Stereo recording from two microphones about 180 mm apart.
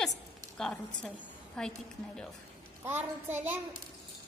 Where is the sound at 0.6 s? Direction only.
5° left (ahead or behind).